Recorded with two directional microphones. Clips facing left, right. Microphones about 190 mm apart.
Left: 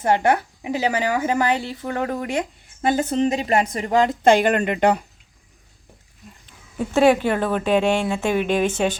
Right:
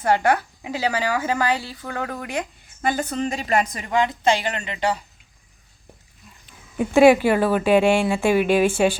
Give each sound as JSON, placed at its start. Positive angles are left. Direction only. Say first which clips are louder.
{"t": 0.0, "sound": "a woman's voice", "louder": "left 1 dB", "side_deg": 20}
{"t": 6.4, "sound": "speech", "louder": "right 2 dB", "side_deg": -10}